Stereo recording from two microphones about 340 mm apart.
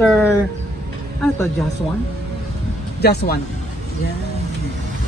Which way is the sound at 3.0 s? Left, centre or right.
Left.